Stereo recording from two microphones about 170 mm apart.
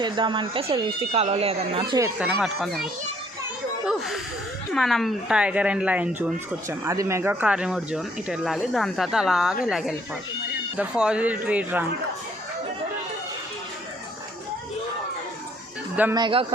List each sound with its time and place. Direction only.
0.0 s speech: 25° right (ahead or behind)
2.1 s speech: 5° right (ahead or behind)
3.8 s a sound: centre (ahead or behind)
4.7 s speech: centre (ahead or behind)
16.1 s speech: 30° right (ahead or behind)